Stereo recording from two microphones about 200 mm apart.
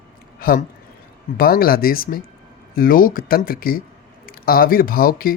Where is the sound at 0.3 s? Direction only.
45° left (ahead or behind).